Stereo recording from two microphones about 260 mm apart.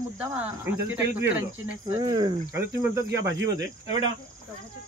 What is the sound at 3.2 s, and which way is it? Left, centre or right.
Speech, right.